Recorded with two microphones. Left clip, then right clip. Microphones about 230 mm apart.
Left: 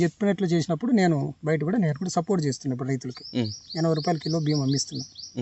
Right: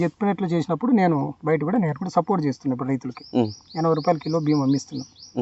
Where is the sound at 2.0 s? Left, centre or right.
Left.